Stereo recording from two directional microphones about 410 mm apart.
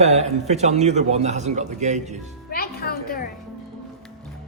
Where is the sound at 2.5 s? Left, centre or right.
Left.